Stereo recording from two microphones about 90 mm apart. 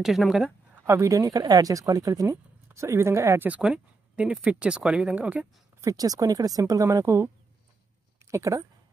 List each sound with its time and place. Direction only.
0.0 s a woman's voice: centre (ahead or behind)
0.8 s speech: 35° right (ahead or behind)
3.4 s speech: 15° right (ahead or behind)
5.8 s speech: 40° right (ahead or behind)
8.3 s speech: 35° right (ahead or behind)